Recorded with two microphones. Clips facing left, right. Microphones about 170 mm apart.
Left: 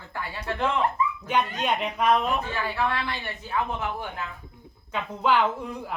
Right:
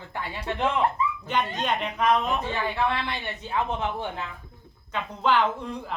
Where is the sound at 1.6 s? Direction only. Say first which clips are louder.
Even; 5° left (ahead or behind).